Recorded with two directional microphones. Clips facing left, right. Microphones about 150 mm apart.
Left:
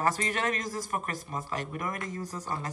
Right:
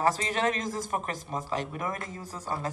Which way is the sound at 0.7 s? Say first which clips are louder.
Right 2 dB; 25° right (ahead or behind).